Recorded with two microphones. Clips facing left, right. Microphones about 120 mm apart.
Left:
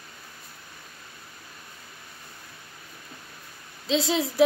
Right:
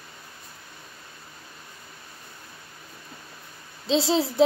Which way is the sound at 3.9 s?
30° right (ahead or behind).